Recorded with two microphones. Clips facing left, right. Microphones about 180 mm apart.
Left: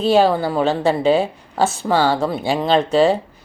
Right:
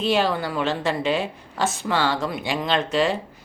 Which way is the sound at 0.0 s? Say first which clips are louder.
Left 7 dB; 35° left (ahead or behind).